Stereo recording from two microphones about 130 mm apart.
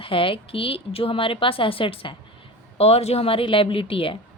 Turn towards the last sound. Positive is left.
turn(degrees=45)  # may be behind; listen again after turning